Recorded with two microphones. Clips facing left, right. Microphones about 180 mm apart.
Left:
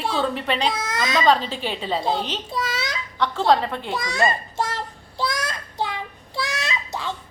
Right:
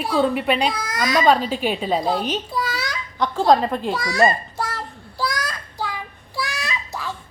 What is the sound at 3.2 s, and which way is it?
Speech, 10° right (ahead or behind).